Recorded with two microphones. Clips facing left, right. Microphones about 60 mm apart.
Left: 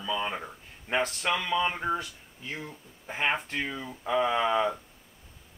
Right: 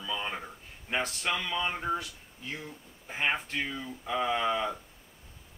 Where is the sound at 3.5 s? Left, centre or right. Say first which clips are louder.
Left 1 dB; left.